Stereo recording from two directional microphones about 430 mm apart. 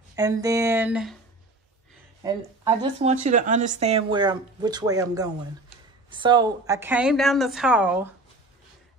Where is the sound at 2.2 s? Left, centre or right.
Centre.